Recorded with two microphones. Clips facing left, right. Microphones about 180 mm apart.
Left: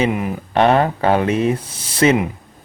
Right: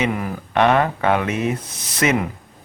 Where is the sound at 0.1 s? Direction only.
20° left (ahead or behind).